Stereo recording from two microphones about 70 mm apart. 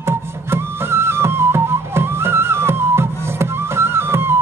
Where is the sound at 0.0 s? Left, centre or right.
Right.